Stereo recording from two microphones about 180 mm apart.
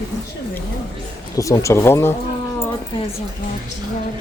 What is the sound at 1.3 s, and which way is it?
Speech, 20° left (ahead or behind).